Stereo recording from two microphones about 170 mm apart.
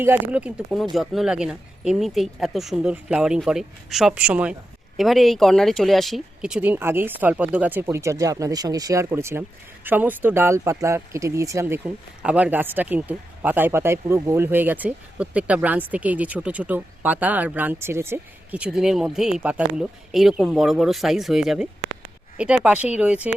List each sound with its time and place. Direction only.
0.0 s speech: 10° right (ahead or behind)